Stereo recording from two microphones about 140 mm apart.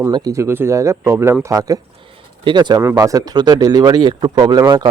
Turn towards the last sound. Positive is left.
turn(degrees=-30)  # may be behind; listen again after turning